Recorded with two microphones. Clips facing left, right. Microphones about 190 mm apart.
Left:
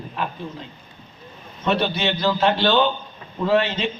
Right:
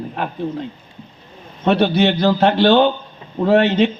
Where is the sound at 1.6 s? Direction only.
55° right (ahead or behind).